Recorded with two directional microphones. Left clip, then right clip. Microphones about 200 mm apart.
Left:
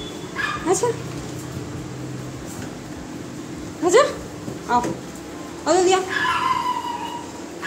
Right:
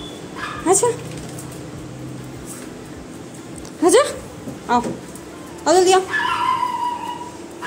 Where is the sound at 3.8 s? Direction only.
30° right (ahead or behind).